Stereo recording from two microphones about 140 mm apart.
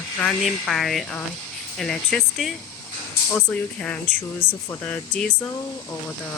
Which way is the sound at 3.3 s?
15° left (ahead or behind).